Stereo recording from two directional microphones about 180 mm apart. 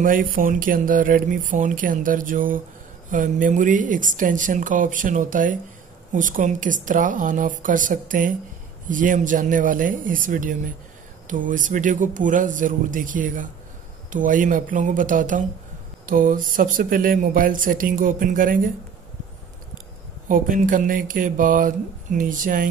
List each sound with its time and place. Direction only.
0.0 s speech: 50° right (ahead or behind)
20.2 s speech: 50° right (ahead or behind)